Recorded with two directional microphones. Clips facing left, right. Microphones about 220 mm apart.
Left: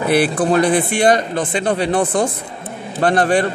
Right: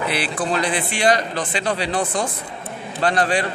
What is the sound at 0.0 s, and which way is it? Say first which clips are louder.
A man's voice: left 8 dB; 50° left (ahead or behind).